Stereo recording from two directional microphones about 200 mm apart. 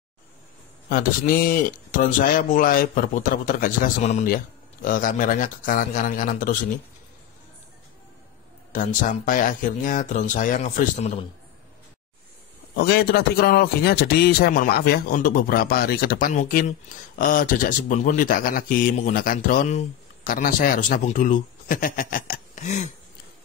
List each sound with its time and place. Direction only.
0.8 s a man's voice: 45° left (ahead or behind)
8.7 s speech: 40° left (ahead or behind)
12.7 s a man's voice: 50° left (ahead or behind); by 22.8 s 35° left (ahead or behind)